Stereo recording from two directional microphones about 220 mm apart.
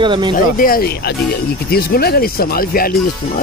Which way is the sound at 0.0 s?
20° right (ahead or behind).